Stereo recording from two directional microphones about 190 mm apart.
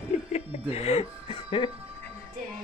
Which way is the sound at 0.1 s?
35° left (ahead or behind).